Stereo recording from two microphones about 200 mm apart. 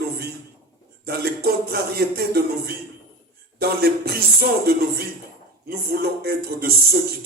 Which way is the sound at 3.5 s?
50° right (ahead or behind).